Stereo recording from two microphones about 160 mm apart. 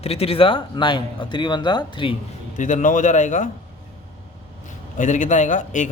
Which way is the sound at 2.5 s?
50° left (ahead or behind).